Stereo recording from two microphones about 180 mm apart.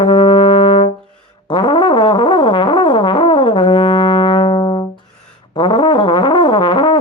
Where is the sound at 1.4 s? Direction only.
25° left (ahead or behind).